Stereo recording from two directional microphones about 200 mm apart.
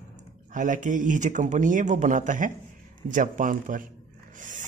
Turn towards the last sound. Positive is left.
turn(degrees=-40)  # may be behind; listen again after turning